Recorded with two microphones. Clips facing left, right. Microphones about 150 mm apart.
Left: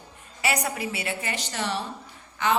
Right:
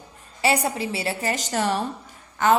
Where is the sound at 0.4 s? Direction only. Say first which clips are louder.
Right 5 dB; 30° right (ahead or behind).